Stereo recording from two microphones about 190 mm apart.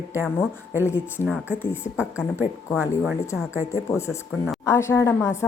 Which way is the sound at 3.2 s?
15° left (ahead or behind).